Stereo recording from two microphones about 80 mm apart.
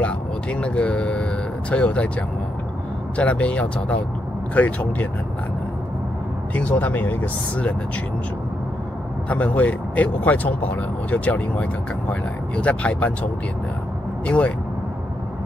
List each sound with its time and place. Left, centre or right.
0.0 s speech: centre
3.2 s speech: centre
6.5 s speech: centre
9.3 s speech: centre